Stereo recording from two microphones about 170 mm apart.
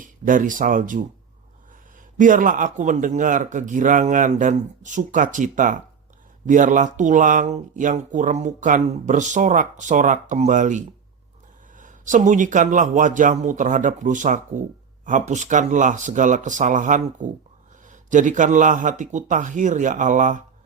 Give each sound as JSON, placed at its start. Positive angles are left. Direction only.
{"t": 0.0, "sound": "speech", "side_deg": -50}
{"t": 2.1, "sound": "speech", "side_deg": -50}